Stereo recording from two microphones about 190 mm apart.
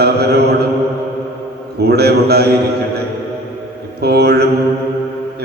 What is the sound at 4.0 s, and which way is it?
Speech, 60° right (ahead or behind).